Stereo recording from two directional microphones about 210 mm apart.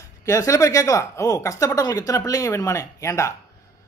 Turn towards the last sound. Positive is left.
turn(degrees=15)  # may be behind; listen again after turning